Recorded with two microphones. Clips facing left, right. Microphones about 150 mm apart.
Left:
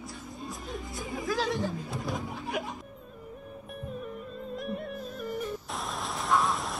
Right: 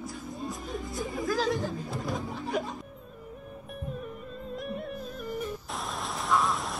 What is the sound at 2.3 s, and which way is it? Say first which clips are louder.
Speech: right 3 dB; 20° left (ahead or behind).